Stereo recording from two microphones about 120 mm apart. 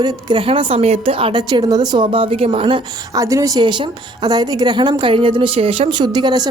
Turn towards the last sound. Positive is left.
turn(degrees=-35)  # may be behind; listen again after turning